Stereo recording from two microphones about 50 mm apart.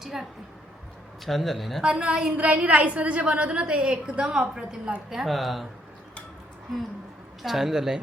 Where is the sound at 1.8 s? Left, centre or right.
Centre.